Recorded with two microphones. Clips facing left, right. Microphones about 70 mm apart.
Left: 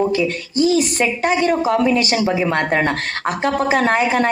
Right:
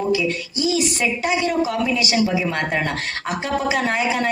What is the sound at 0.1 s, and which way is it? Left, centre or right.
A woman's voice, left.